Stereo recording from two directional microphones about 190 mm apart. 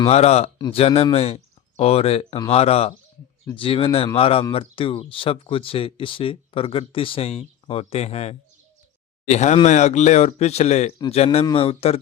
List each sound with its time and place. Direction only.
0.1 s speech: 35° left (ahead or behind)